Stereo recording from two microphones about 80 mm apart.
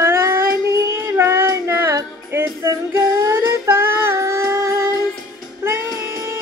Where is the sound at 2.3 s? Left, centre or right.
Right.